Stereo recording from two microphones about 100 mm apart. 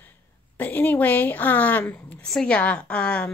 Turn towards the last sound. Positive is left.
turn(degrees=10)  # may be behind; listen again after turning